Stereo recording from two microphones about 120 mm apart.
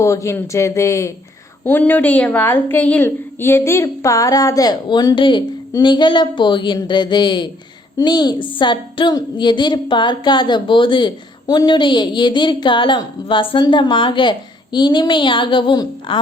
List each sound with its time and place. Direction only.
0.0 s a woman's voice: 25° left (ahead or behind); by 16.2 s 40° left (ahead or behind)